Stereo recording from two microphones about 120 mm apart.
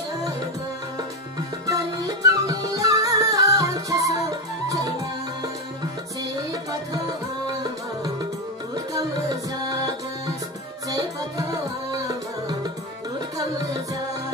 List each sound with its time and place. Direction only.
1.7 s music: 30° right (ahead or behind)
8.9 s music: 35° right (ahead or behind)
11.9 s music: 35° right (ahead or behind)